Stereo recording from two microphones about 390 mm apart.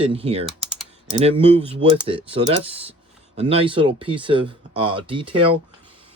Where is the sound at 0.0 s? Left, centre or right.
Centre.